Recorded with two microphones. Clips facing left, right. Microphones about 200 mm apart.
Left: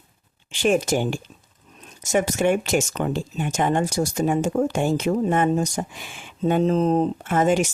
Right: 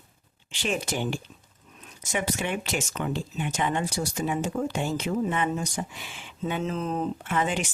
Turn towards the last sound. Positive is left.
turn(degrees=45)  # may be behind; listen again after turning